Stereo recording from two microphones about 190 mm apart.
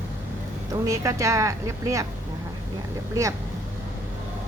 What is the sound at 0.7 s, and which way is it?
Speech, 15° right (ahead or behind).